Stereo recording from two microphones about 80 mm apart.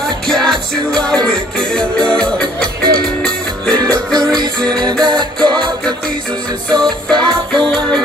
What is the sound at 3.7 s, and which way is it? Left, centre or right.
Music, right.